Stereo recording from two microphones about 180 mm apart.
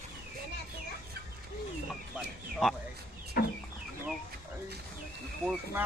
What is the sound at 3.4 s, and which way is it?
Chicken, 55° left (ahead or behind).